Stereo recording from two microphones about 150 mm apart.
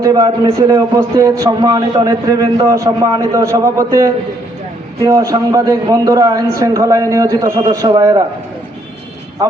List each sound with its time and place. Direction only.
0.0 s a man's voice: 25° right (ahead or behind)